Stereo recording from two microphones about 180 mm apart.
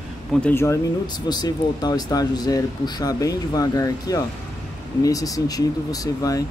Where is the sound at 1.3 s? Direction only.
20° left (ahead or behind).